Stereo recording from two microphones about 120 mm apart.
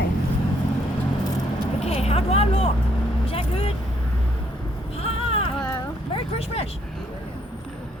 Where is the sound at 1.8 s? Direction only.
60° left (ahead or behind).